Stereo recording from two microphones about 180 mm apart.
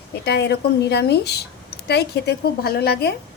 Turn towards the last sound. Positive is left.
turn(degrees=60)  # may be behind; listen again after turning